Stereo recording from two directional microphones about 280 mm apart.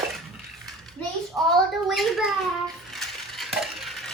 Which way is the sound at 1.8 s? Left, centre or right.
Centre.